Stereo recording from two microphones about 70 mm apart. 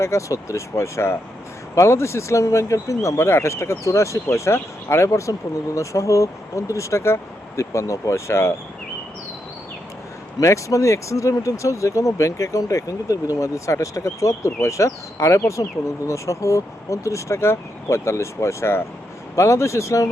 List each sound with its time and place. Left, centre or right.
0.0 s speech: left
10.4 s speech: left